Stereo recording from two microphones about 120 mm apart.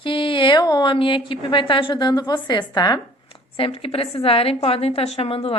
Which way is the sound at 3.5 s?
50° left (ahead or behind).